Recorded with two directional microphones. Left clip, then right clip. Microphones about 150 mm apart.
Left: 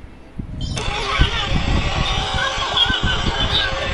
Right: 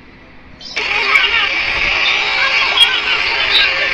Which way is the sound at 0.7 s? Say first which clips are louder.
Right 9 dB; 25° left (ahead or behind).